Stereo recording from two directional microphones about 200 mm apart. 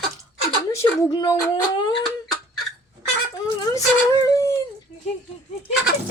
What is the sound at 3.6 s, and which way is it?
Speech, 20° left (ahead or behind).